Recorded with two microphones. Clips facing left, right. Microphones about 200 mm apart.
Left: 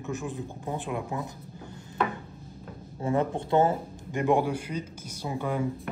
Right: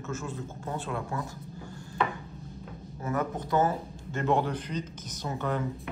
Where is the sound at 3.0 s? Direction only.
30° left (ahead or behind).